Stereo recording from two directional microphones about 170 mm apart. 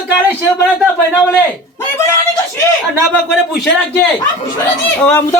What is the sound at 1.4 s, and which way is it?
Speech, 10° left (ahead or behind).